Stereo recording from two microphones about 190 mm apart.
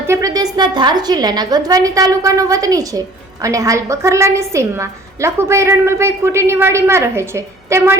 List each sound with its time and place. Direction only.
0.1 s a woman's voice: 15° right (ahead or behind)